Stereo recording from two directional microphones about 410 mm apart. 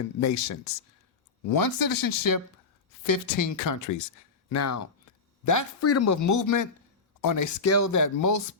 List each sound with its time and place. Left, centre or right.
0.2 s speech: left
1.5 s speech: left